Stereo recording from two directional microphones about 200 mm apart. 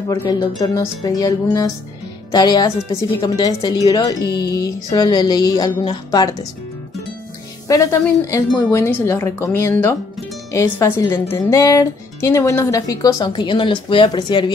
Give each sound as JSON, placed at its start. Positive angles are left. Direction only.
{"t": 0.1, "sound": "speech", "side_deg": 20}
{"t": 7.6, "sound": "speech", "side_deg": 15}